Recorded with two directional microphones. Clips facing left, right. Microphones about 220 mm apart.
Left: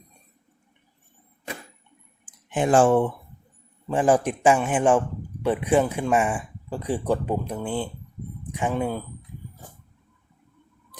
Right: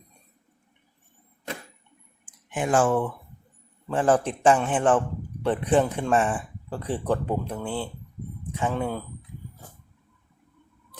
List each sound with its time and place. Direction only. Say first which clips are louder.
2.5 s speech: left 4 dB; 30° left (ahead or behind)
3.8 s a man's voice: left 2 dB; 15° left (ahead or behind)